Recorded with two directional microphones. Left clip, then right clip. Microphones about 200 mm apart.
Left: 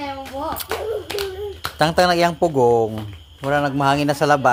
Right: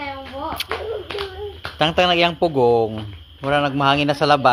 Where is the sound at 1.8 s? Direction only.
25° left (ahead or behind).